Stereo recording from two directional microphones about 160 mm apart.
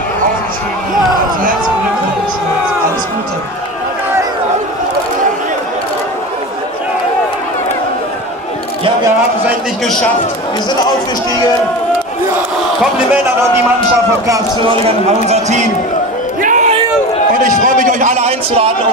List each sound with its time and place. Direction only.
14.2 s a man's voice: 20° right (ahead or behind)
15.2 s a man's voice: 45° right (ahead or behind)
16.4 s a sound: 50° right (ahead or behind)